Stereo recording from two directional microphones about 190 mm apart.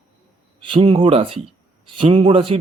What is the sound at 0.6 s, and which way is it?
A man's voice, 25° right (ahead or behind).